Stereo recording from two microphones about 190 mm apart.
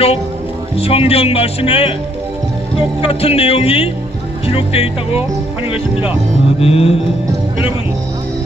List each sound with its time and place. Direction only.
0.7 s speech: 30° left (ahead or behind)
3.0 s speech: 30° left (ahead or behind)
6.6 s speech: 30° left (ahead or behind)